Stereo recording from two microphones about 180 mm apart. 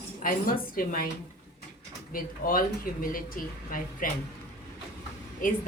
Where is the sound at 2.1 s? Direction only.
50° left (ahead or behind).